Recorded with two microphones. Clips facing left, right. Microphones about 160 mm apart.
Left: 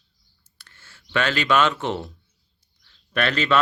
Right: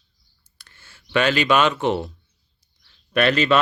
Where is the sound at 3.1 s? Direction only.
15° right (ahead or behind).